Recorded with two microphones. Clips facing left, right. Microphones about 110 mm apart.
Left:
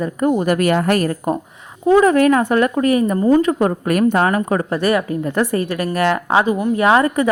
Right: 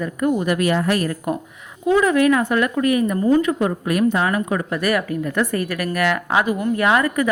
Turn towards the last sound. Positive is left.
turn(degrees=30)  # may be behind; listen again after turning